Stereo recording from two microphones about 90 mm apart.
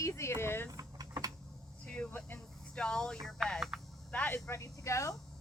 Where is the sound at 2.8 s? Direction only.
10° left (ahead or behind).